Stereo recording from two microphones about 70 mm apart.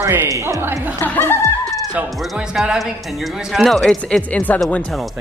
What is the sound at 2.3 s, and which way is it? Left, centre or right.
Speech, centre.